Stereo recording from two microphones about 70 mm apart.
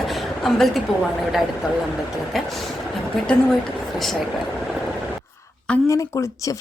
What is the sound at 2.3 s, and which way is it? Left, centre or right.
Speech, centre.